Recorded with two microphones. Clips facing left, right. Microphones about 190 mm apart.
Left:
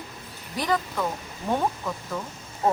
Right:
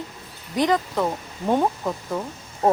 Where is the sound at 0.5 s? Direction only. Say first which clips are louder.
Right 5 dB; 20° right (ahead or behind).